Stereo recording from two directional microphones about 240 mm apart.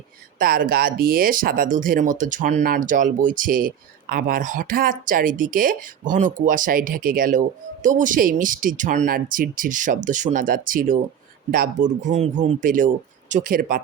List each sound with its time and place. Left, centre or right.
0.3 s speech: right